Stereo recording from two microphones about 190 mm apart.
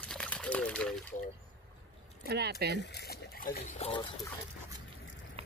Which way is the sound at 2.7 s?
65° left (ahead or behind).